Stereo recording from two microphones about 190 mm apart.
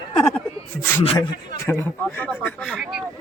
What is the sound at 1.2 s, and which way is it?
Speech, 15° left (ahead or behind).